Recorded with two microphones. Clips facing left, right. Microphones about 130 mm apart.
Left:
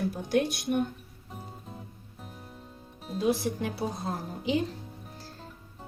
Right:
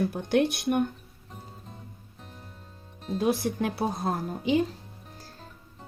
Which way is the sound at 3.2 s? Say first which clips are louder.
Right 1 dB; 60° right (ahead or behind).